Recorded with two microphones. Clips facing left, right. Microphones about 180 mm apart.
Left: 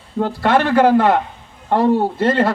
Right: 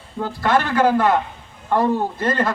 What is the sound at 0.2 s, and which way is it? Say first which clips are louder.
A man's voice: left 4 dB; 30° left (ahead or behind).